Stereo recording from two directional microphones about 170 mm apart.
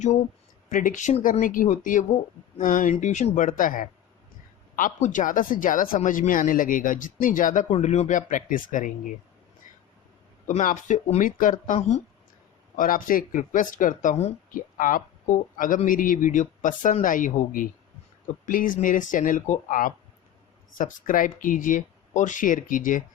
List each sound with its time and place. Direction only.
0.7 s speech: 50° left (ahead or behind)
10.4 s speech: 50° left (ahead or behind)
12.7 s speech: 50° left (ahead or behind)